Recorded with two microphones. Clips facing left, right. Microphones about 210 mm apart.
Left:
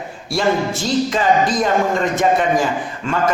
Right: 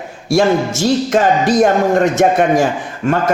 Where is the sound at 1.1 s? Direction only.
50° right (ahead or behind).